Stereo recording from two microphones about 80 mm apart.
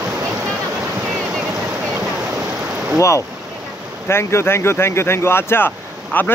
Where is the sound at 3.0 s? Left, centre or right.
Left.